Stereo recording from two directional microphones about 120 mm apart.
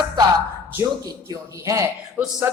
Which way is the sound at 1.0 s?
30° right (ahead or behind).